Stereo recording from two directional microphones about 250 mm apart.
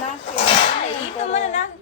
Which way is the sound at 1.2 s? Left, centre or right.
Left.